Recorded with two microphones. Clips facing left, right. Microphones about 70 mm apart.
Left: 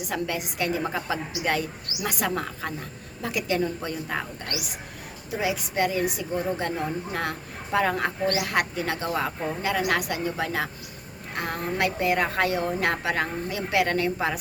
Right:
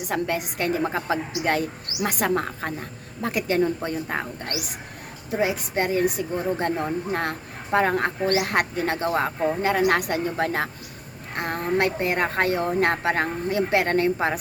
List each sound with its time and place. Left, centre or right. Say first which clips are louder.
0.1 s speech: right 4 dB; right